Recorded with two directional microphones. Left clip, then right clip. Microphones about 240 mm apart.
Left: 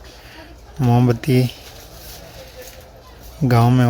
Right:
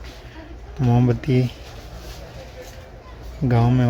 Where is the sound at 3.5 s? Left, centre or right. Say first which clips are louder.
Left 5 dB; left.